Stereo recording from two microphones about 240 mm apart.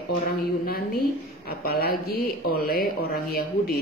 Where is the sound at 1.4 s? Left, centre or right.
Left.